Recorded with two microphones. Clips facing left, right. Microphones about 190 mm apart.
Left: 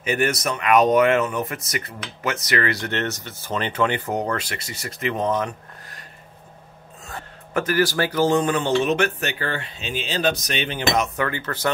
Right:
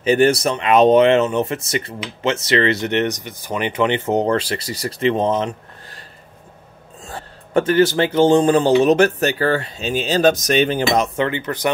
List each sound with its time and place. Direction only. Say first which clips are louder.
0.0 s speech: right 8 dB; 30° right (ahead or behind)
7.1 s speech: right 3 dB; 30° right (ahead or behind)
11.1 s speech: right 5 dB; 20° right (ahead or behind)